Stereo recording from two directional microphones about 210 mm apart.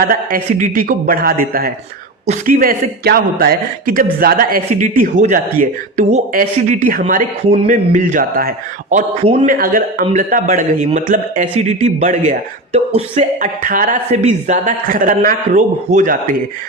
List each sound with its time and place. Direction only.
0.0 s a man's voice: 45° right (ahead or behind)